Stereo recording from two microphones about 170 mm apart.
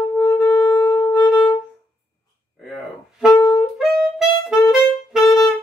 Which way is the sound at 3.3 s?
15° left (ahead or behind).